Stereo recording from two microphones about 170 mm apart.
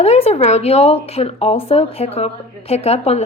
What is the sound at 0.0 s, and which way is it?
Speech, 40° left (ahead or behind).